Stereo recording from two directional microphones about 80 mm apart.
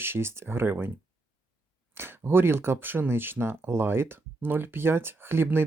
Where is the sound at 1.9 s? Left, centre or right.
Right.